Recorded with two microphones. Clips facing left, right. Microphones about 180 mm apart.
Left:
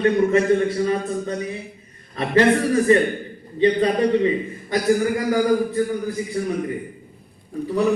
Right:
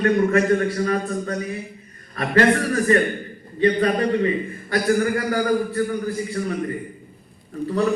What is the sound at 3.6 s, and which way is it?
A man's voice, 20° left (ahead or behind).